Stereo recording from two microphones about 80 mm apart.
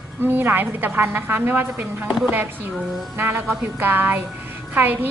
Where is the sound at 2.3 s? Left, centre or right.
Right.